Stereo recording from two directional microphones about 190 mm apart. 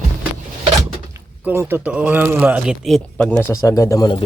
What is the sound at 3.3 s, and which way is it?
Speech, 15° left (ahead or behind).